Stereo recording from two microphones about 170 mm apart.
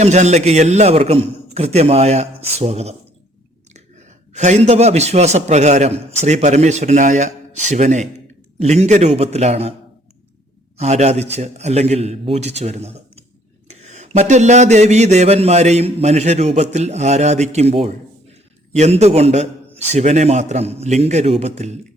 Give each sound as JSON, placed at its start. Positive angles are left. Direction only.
{"t": 0.0, "sound": "a man's voice", "side_deg": -40}
{"t": 4.4, "sound": "a man's voice", "side_deg": -40}
{"t": 10.8, "sound": "a man's voice", "side_deg": -40}